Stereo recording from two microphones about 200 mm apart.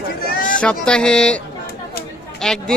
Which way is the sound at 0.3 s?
40° left (ahead or behind).